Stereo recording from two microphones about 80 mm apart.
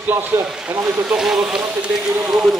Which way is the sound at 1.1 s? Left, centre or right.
Centre.